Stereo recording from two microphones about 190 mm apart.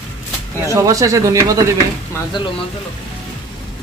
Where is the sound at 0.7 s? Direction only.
15° right (ahead or behind).